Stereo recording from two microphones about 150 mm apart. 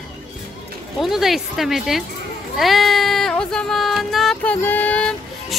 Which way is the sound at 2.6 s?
Centre (ahead or behind).